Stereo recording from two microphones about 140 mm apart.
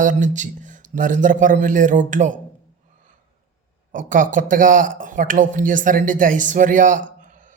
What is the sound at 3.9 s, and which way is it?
Speech, 70° right (ahead or behind).